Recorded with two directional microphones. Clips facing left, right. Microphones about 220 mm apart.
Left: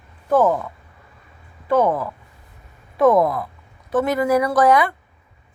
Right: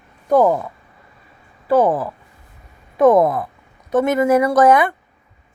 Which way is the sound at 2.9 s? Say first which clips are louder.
Right 3 dB; 20° right (ahead or behind).